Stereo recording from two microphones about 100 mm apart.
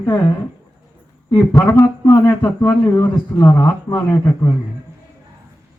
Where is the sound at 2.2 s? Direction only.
25° left (ahead or behind).